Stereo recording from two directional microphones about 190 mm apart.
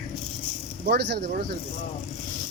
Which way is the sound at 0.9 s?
60° right (ahead or behind).